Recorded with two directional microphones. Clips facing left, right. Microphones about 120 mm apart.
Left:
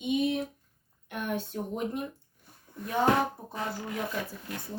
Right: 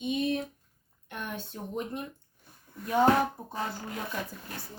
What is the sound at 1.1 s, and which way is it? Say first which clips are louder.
Speech: left 5 dB; 10° left (ahead or behind).